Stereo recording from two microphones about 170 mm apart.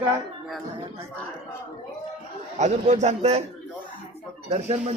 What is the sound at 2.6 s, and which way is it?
Speech, 40° right (ahead or behind).